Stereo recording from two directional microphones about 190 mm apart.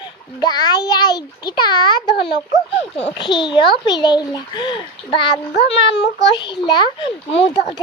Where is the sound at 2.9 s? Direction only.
30° left (ahead or behind).